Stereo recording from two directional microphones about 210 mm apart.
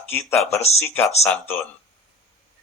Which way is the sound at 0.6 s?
30° left (ahead or behind).